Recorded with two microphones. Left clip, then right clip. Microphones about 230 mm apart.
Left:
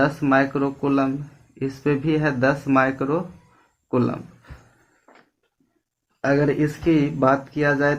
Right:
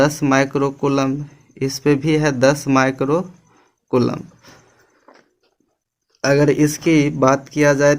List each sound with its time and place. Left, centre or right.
0.0 s speech: right
5.1 s a sound: right
6.2 s speech: right